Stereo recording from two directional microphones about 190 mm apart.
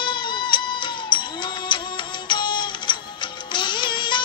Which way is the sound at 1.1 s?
25° left (ahead or behind).